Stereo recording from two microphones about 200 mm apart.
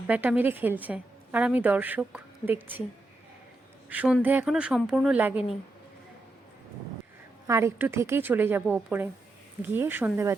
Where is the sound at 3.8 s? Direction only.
5° right (ahead or behind).